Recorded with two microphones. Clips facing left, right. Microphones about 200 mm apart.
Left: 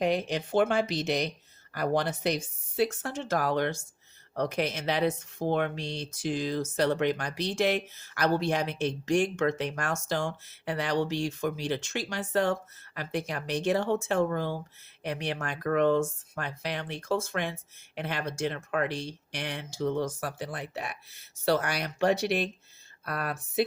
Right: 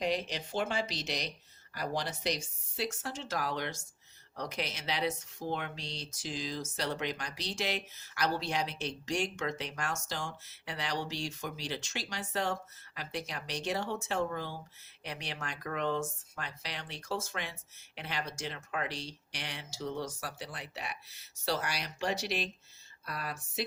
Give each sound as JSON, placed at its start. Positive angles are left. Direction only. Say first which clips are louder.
{"t": 0.0, "sound": "speech", "louder": "left 6 dB", "side_deg": 55}